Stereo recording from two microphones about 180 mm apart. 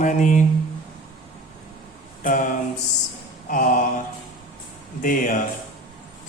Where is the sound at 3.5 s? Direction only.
50° left (ahead or behind).